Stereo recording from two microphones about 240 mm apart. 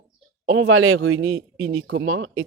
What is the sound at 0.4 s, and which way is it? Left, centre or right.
Speech, right.